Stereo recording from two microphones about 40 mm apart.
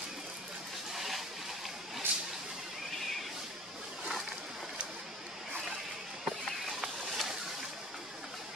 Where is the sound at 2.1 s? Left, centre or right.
Right.